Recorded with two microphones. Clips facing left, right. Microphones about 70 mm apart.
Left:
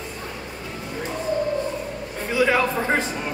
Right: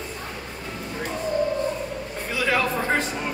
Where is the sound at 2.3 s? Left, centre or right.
Centre.